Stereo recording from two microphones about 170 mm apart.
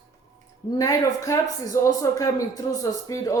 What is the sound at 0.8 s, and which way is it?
A man's voice, 20° left (ahead or behind).